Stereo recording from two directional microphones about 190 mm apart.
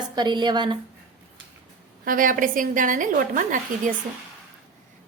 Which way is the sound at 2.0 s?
45° right (ahead or behind).